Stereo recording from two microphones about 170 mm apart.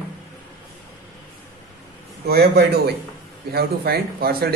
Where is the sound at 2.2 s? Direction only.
70° right (ahead or behind).